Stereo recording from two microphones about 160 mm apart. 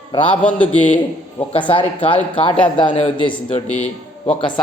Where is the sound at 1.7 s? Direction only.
35° left (ahead or behind).